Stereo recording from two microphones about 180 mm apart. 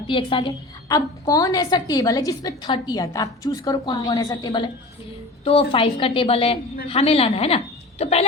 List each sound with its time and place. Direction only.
0.1 s a woman's voice: 30° left (ahead or behind)